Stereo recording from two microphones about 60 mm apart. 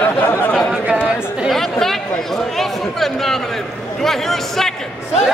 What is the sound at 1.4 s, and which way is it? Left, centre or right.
Chatter, centre.